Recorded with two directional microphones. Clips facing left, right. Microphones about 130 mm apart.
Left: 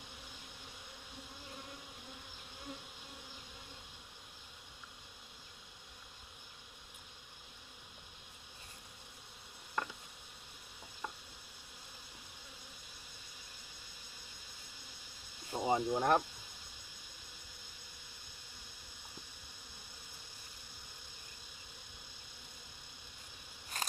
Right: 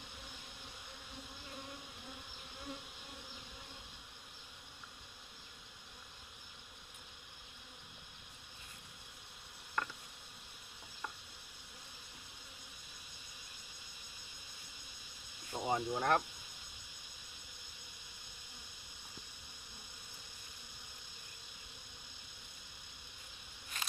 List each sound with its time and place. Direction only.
9.8 s insect: 15° left (ahead or behind)
15.5 s speech: 10° left (ahead or behind)
23.7 s scissors: 40° left (ahead or behind)